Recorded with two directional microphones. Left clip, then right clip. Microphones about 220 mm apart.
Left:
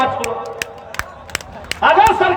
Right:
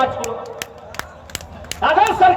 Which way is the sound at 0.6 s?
25° left (ahead or behind).